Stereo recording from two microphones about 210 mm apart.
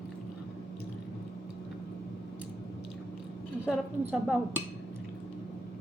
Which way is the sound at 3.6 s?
Centre (ahead or behind).